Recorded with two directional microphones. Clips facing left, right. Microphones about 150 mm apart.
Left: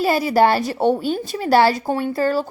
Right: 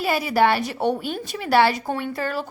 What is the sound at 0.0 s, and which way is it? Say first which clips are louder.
A woman's voice: left 4 dB; 35° left (ahead or behind).